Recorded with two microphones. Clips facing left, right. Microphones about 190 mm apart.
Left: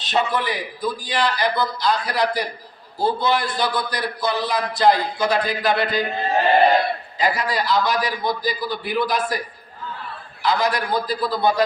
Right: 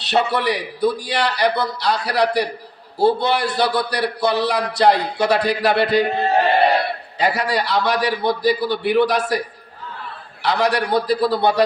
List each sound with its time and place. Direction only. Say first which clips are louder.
0.0 s a man's voice: right 3 dB; 70° right (ahead or behind)
7.2 s a man's voice: right 3 dB; 70° right (ahead or behind)
10.4 s a man's voice: right 2 dB; 70° right (ahead or behind)